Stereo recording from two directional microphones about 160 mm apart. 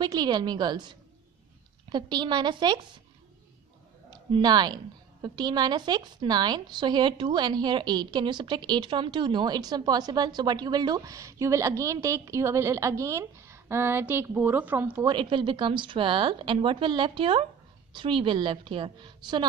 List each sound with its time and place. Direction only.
0.0 s a woman's voice: 25° right (ahead or behind)
4.1 s a woman's voice: 25° right (ahead or behind)
15.0 s speech: 30° right (ahead or behind)